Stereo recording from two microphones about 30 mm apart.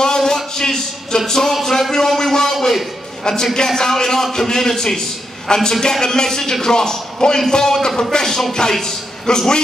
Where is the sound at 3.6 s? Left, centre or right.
Centre.